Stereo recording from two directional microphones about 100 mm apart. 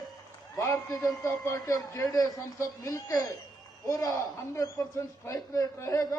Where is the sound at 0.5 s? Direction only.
35° left (ahead or behind).